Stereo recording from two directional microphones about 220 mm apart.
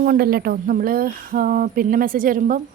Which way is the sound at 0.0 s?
45° right (ahead or behind).